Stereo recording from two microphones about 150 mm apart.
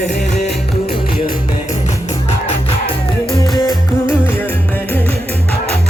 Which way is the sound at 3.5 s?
25° left (ahead or behind).